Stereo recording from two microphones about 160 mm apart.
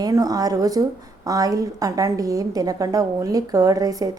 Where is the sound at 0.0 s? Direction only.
25° right (ahead or behind).